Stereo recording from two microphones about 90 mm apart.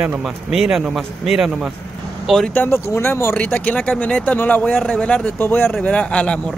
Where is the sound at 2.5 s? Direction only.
25° left (ahead or behind).